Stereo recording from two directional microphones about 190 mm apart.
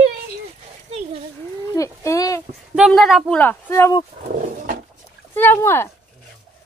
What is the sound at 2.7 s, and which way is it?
Speech, centre (ahead or behind).